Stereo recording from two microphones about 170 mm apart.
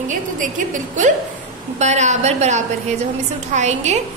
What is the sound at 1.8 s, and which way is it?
A woman's voice, 40° right (ahead or behind).